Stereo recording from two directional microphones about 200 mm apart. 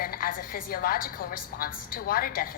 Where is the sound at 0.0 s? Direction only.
45° left (ahead or behind).